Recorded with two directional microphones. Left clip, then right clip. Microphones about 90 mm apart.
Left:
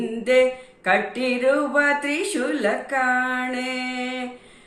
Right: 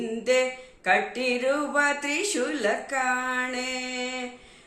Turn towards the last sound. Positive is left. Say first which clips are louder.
# left 3 dB
turn(degrees=-35)  # may be behind; listen again after turning